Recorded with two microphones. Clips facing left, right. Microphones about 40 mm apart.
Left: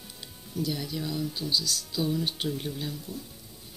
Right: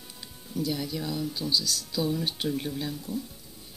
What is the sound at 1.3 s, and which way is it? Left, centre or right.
Speech, left.